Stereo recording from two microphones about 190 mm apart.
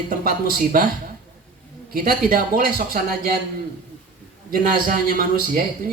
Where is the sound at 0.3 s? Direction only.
50° right (ahead or behind).